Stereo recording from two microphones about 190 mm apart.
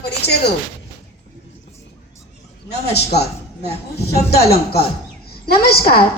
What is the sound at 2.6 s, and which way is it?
Speech, 60° left (ahead or behind).